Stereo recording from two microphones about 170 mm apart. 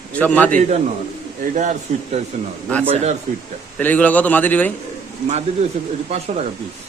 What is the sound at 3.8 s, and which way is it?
Speech, 10° left (ahead or behind).